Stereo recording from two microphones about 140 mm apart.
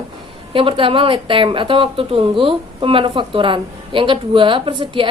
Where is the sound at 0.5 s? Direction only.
40° right (ahead or behind).